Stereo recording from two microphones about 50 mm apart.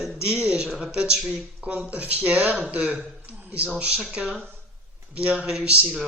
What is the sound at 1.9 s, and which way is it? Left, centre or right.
A man's voice, right.